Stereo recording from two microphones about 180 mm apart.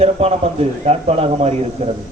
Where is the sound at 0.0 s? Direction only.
35° right (ahead or behind).